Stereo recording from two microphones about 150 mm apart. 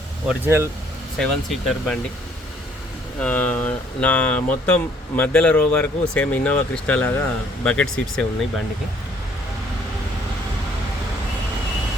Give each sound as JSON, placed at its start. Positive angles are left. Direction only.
{"t": 0.4, "sound": "speech", "side_deg": -15}
{"t": 1.2, "sound": "speech", "side_deg": 5}
{"t": 3.2, "sound": "speech", "side_deg": 10}